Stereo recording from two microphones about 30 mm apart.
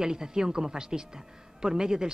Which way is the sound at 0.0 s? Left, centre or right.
Right.